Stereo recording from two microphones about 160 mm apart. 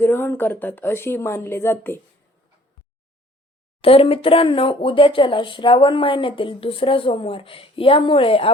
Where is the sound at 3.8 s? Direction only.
35° left (ahead or behind).